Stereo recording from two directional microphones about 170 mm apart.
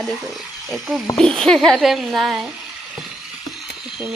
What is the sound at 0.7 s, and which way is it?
Speech, centre (ahead or behind).